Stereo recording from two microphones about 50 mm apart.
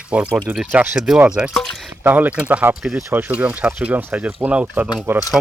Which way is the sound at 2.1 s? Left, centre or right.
Right.